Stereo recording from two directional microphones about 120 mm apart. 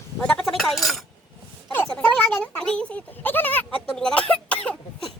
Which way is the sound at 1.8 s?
5° left (ahead or behind).